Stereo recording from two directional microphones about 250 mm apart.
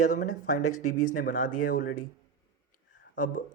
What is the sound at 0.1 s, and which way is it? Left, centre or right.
Speech, left.